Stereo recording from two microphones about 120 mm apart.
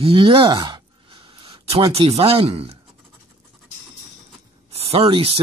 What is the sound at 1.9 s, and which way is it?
Speech, 55° right (ahead or behind).